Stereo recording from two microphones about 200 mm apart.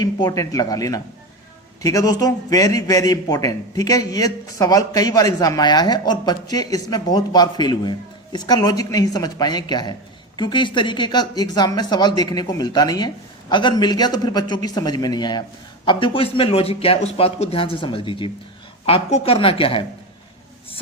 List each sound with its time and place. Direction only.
0.0 s a man's voice: 20° left (ahead or behind)